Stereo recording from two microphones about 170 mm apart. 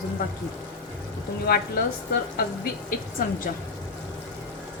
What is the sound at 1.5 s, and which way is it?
Speech, 65° left (ahead or behind).